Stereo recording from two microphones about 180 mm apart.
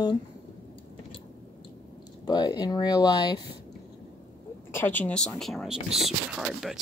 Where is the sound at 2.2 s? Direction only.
25° left (ahead or behind).